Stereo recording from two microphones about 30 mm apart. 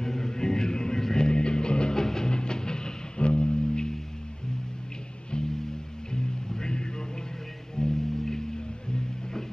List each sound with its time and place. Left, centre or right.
0.0 s music: centre
2.0 s music: centre
3.2 s music: left
6.1 s music: left